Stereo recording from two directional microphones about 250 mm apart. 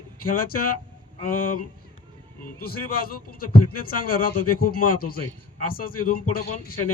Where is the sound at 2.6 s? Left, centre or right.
Left.